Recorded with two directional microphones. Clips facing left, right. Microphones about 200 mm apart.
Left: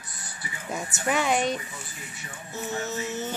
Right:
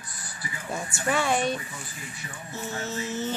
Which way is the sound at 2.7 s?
20° left (ahead or behind).